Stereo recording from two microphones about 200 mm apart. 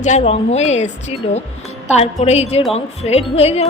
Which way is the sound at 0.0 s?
35° left (ahead or behind).